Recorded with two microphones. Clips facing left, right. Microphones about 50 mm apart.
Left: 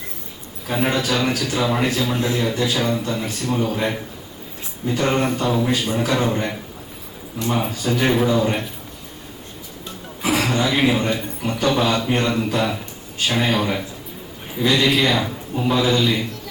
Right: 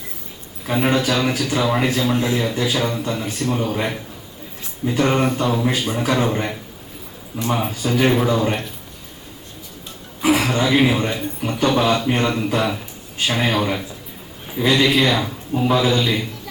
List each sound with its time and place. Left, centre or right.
0.7 s a man's voice: centre
2.1 s a man's voice: centre
2.4 s a man's voice: centre
5.6 s a man's voice: centre
8.0 s a man's voice: centre
10.2 s a man's voice: centre